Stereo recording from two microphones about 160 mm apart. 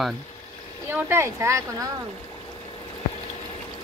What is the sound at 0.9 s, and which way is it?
Speech, 15° right (ahead or behind).